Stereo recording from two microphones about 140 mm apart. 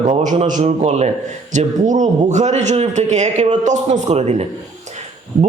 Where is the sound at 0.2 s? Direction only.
60° right (ahead or behind).